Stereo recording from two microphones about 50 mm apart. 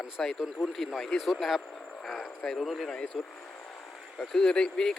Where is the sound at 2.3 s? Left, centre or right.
Left.